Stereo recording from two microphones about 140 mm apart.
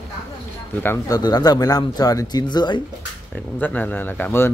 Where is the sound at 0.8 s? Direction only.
20° left (ahead or behind).